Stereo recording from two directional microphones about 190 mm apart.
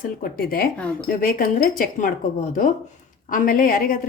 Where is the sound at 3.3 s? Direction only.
45° left (ahead or behind).